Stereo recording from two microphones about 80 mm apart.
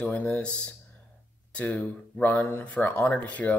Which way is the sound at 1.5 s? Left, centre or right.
Centre.